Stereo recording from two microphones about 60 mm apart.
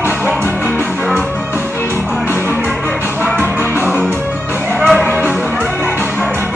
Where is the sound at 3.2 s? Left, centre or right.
Right.